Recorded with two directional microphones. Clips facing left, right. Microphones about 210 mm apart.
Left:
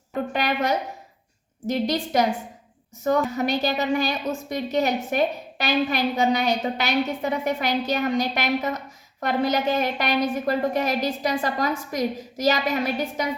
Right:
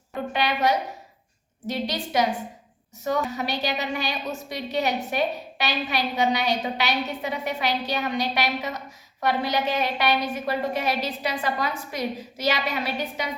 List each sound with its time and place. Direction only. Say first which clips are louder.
0.3 s a woman's voice: right 1 dB; 45° left (ahead or behind)